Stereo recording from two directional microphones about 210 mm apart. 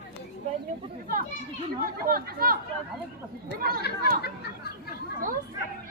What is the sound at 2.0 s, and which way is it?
Speech, 45° right (ahead or behind).